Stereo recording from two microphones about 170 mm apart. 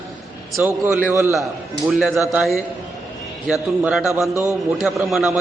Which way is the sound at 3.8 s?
5° right (ahead or behind).